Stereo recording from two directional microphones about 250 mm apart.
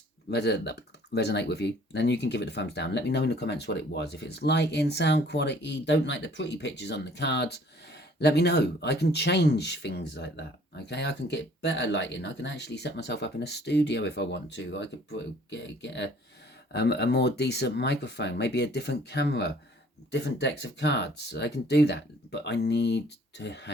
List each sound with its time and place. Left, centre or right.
0.3 s speech: left